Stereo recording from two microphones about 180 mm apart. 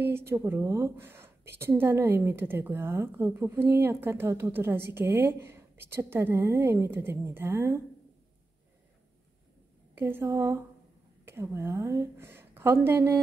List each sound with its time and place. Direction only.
0.0 s a woman's voice: 15° right (ahead or behind)
9.9 s a woman's voice: 10° right (ahead or behind)